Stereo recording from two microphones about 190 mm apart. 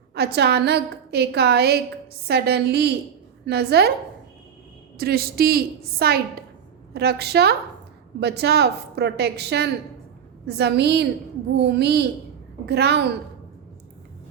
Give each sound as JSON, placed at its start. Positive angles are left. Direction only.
{"t": 0.1, "sound": "a woman's voice", "side_deg": -60}
{"t": 4.9, "sound": "a woman's voice", "side_deg": -55}